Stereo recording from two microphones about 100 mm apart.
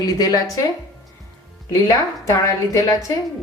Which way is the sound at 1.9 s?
35° left (ahead or behind).